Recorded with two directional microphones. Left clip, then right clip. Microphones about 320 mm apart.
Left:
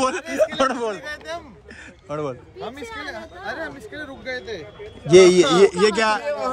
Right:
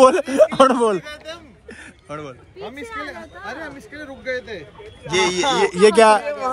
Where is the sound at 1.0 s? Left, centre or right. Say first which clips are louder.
Left 3 dB; centre.